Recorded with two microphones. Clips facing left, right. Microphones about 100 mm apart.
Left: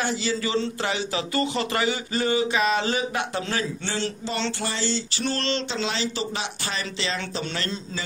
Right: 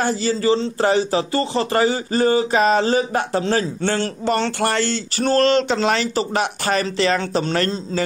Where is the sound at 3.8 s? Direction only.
50° right (ahead or behind).